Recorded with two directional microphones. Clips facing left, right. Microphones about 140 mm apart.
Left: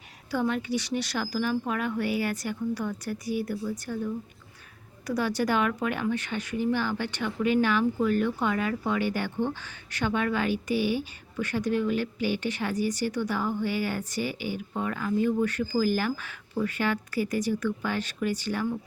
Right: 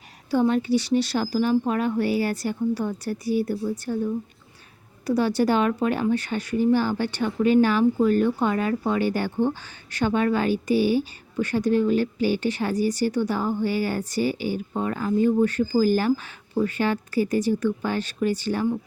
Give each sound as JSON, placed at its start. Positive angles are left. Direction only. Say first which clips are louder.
{"t": 0.3, "sound": "speech", "louder": "right 7 dB", "side_deg": -30}